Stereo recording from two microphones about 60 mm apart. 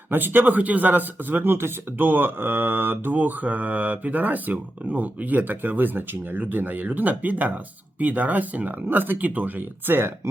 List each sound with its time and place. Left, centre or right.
0.1 s speech: right